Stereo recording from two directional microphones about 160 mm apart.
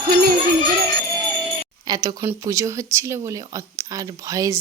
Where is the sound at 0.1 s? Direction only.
70° right (ahead or behind).